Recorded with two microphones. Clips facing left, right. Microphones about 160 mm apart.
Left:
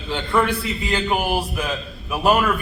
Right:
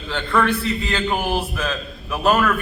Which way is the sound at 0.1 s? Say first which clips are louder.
Even; 15° left (ahead or behind).